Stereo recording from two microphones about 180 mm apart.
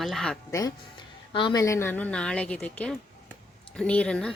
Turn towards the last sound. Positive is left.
turn(degrees=5)  # may be behind; listen again after turning